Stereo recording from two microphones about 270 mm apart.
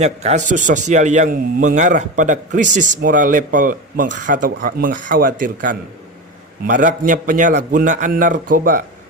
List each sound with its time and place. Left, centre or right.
0.0 s a man's voice: right